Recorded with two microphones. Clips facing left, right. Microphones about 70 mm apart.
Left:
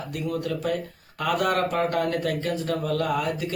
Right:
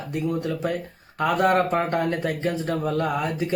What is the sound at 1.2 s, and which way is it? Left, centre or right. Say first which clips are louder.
Speech: right 4 dB; right.